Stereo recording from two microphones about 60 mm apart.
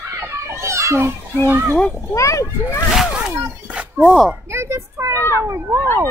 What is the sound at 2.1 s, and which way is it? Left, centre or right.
Speech, left.